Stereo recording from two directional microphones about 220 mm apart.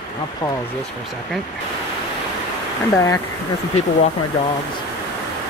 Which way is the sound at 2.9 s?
15° left (ahead or behind).